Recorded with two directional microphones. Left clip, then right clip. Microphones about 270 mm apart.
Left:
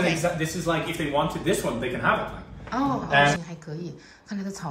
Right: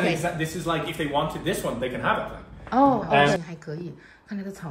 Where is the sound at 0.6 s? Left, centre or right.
Right.